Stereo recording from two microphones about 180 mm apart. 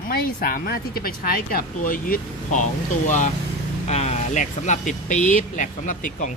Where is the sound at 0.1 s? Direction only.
55° left (ahead or behind).